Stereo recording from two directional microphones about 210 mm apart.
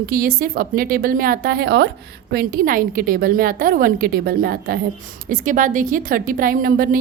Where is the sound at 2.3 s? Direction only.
45° right (ahead or behind).